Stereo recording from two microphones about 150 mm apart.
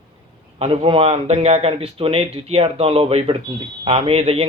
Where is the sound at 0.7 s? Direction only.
35° right (ahead or behind).